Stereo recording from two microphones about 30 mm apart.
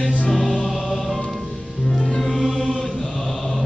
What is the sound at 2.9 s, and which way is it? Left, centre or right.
Chant, left.